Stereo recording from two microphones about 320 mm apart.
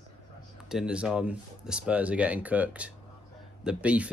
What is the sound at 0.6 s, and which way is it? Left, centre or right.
Speech, centre.